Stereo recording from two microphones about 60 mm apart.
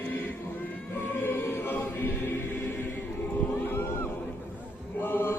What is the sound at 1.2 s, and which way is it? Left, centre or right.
Choir, left.